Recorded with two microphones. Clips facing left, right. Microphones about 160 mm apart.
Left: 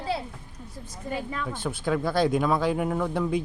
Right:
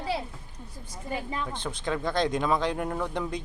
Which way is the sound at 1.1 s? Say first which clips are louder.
Left 1 dB; 20° right (ahead or behind).